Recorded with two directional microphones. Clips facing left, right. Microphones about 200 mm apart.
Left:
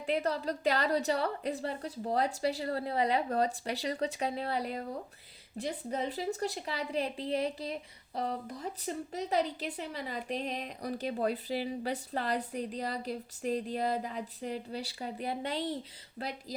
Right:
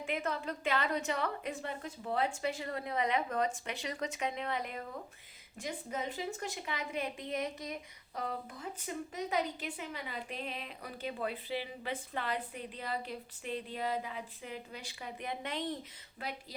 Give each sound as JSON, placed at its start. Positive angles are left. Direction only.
{"t": 0.0, "sound": "a woman's voice", "side_deg": 35}